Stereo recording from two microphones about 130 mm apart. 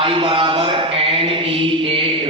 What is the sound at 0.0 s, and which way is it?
Mantra, 45° right (ahead or behind).